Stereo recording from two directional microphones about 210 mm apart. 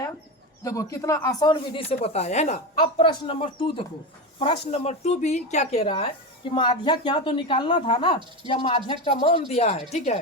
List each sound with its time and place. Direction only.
0.6 s speech: 15° left (ahead or behind); by 10.2 s 30° left (ahead or behind)